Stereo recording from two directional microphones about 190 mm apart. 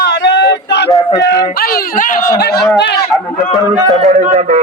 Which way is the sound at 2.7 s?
65° left (ahead or behind).